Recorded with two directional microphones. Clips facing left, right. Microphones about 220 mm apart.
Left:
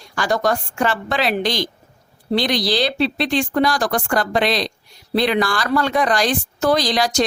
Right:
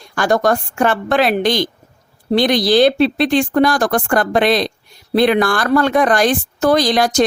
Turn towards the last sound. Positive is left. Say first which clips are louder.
# right 4 dB
turn(degrees=-50)  # may be behind; listen again after turning